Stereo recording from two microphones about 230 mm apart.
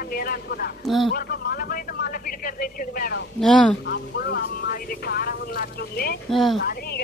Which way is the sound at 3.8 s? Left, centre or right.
Left.